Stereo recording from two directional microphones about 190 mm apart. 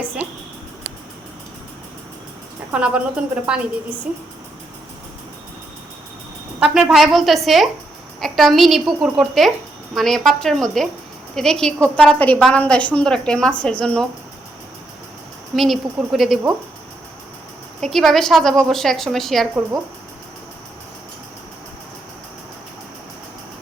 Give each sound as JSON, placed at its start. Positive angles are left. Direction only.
{"t": 2.7, "sound": "a woman's voice", "side_deg": -5}
{"t": 6.6, "sound": "a woman's voice", "side_deg": 0}
{"t": 15.5, "sound": "a woman's voice", "side_deg": 0}
{"t": 17.7, "sound": "a woman's voice", "side_deg": 0}